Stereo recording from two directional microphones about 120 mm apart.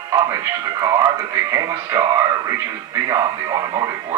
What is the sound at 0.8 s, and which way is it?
Speech, 35° right (ahead or behind).